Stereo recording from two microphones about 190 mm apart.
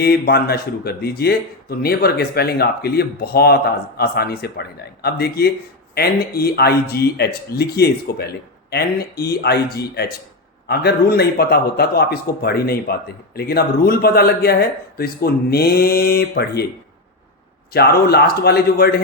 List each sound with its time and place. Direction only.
0.0 s a man's voice: 55° left (ahead or behind)
17.7 s a man's voice: 55° left (ahead or behind)